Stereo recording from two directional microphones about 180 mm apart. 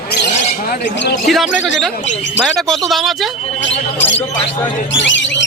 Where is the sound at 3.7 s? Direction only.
90° left.